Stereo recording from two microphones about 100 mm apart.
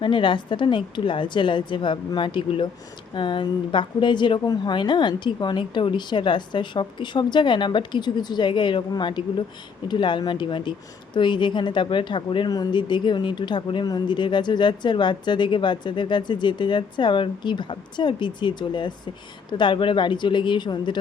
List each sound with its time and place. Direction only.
0.0 s a woman's voice: 55° left (ahead or behind)